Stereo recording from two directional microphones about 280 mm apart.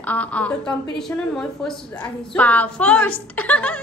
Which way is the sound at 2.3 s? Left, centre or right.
Centre.